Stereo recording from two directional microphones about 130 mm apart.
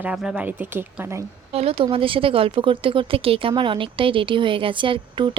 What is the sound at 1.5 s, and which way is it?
A woman's voice, 50° right (ahead or behind).